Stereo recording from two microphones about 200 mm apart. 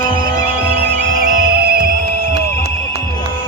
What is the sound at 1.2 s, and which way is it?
Music, 45° right (ahead or behind).